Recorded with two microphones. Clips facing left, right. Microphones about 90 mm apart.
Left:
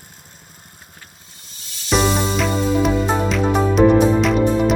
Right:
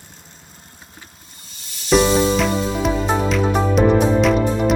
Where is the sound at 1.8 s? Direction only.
Centre (ahead or behind).